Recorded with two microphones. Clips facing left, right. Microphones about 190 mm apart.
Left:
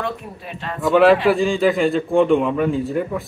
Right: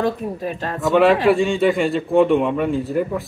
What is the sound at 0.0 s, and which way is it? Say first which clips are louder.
Speech: right 6 dB; 40° right (ahead or behind).